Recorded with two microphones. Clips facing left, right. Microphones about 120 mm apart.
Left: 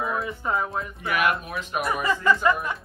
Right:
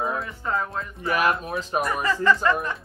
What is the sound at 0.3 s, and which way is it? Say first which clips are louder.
Speech: left 1 dB; 15° left (ahead or behind).